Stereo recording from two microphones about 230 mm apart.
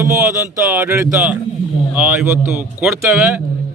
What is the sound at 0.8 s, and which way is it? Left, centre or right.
A man's voice, centre.